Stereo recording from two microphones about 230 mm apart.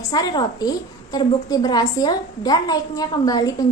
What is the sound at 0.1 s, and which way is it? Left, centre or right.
A woman's voice, centre.